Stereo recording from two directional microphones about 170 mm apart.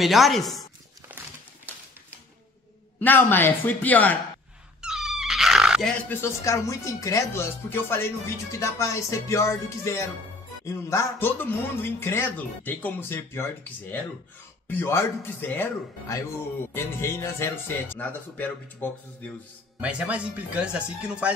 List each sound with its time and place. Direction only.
0.0 s chopping: centre (ahead or behind)
3.0 s speech: 10° left (ahead or behind)
4.8 s cat: 5° right (ahead or behind)
6.2 s speech: 15° left (ahead or behind)
19.8 s speech: 10° right (ahead or behind)